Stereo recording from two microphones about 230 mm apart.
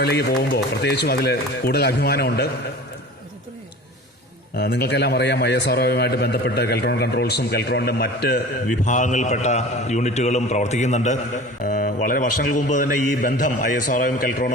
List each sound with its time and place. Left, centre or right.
0.0 s a man's voice: left
4.5 s a man's voice: left